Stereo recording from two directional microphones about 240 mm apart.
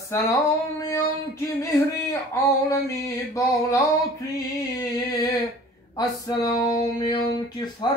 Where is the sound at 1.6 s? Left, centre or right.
Centre.